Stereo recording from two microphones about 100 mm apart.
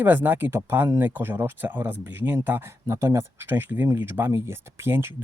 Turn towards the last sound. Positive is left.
turn(degrees=-25)  # may be behind; listen again after turning